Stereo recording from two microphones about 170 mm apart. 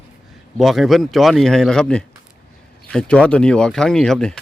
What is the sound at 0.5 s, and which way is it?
Speech, centre (ahead or behind).